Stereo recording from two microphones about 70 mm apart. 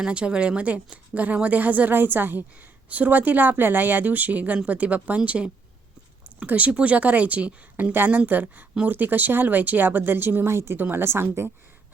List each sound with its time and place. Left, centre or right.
0.0 s a woman's voice: centre; by 11.5 s right